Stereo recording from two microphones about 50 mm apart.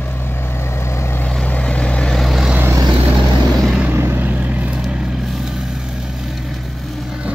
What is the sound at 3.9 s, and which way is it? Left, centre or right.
Vehicle, right.